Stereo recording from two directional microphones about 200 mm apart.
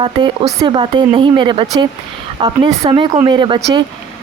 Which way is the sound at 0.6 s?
25° right (ahead or behind).